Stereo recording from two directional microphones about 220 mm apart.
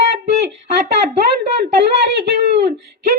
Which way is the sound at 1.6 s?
50° right (ahead or behind).